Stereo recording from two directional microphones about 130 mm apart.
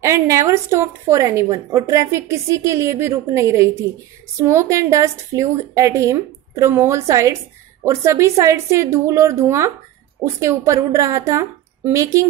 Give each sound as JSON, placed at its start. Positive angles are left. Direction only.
{"t": 0.0, "sound": "a woman's voice", "side_deg": -25}